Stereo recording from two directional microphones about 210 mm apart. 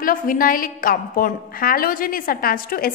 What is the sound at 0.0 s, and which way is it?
A woman's voice, 40° left (ahead or behind).